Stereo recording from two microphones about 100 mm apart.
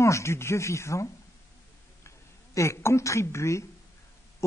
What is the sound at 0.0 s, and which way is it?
A woman's voice, 30° left (ahead or behind).